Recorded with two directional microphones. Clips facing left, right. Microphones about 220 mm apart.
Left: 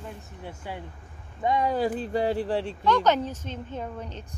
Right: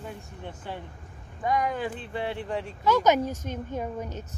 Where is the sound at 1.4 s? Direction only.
25° left (ahead or behind).